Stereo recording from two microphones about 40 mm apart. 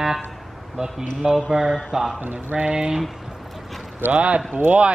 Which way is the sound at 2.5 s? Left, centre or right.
Right.